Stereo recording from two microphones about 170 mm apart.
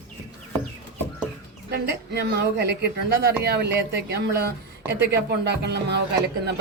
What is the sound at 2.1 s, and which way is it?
Speech, 75° right (ahead or behind).